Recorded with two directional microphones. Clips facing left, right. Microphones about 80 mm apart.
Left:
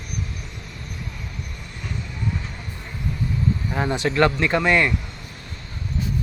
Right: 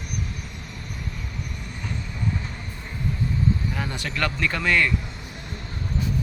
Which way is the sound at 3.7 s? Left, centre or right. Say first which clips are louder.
Left 7 dB; left.